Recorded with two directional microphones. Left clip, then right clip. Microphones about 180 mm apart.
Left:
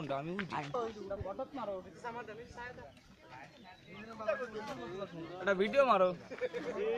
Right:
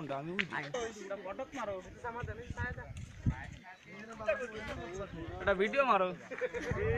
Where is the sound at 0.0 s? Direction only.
Centre (ahead or behind).